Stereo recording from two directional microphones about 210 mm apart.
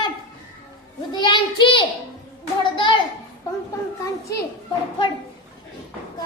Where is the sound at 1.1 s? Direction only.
20° left (ahead or behind).